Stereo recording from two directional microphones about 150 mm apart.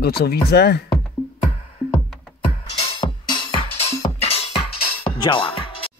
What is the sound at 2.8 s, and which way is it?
Music, 35° left (ahead or behind).